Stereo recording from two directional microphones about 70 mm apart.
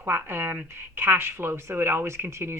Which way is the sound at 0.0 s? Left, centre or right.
Right.